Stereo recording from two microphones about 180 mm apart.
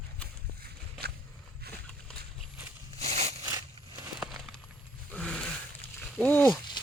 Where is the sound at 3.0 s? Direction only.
35° right (ahead or behind).